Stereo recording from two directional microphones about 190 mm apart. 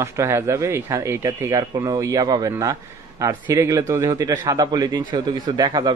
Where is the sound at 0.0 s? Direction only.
15° right (ahead or behind).